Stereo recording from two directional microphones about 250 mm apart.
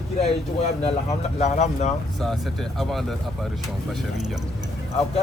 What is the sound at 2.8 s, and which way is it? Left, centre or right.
Speech, centre.